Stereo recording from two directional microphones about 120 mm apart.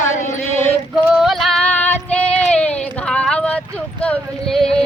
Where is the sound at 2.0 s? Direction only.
10° left (ahead or behind).